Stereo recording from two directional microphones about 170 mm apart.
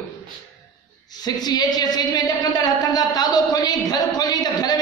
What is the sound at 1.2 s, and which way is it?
A woman's voice, 25° left (ahead or behind).